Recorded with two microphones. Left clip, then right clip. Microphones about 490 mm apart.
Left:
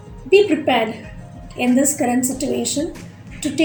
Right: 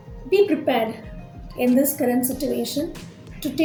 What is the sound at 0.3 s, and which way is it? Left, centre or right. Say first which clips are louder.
A woman's voice: left 4 dB; right.